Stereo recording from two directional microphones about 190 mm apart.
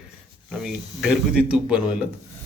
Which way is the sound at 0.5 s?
5° right (ahead or behind).